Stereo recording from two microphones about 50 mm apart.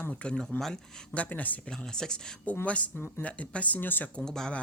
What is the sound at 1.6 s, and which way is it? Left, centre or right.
Speech, centre.